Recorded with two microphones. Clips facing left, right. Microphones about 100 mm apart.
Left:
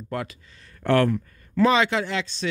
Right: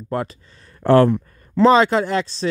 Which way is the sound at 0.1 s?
35° right (ahead or behind).